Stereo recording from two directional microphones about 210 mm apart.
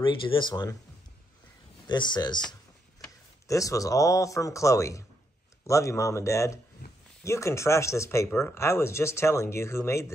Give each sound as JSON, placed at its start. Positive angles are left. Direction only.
{"t": 0.0, "sound": "speech", "side_deg": 20}
{"t": 1.9, "sound": "speech", "side_deg": 20}